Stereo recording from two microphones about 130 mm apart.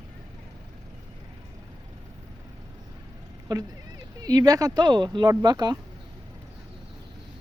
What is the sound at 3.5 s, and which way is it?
Speech, 30° right (ahead or behind).